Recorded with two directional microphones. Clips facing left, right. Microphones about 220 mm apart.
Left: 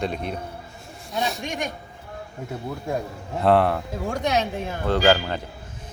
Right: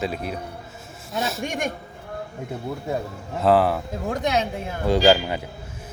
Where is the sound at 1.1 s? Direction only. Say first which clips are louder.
Even; centre (ahead or behind).